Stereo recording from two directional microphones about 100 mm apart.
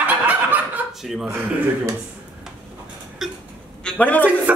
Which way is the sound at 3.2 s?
Centre (ahead or behind).